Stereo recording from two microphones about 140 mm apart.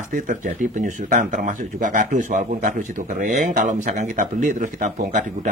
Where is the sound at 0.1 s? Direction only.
65° right (ahead or behind).